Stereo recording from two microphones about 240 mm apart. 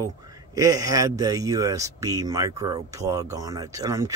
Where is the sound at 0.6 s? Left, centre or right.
Centre.